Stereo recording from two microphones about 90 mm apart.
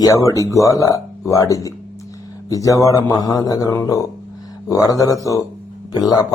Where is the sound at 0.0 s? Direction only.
40° left (ahead or behind).